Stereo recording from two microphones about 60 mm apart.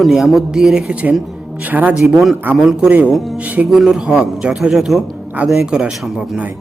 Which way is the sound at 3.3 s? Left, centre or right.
Right.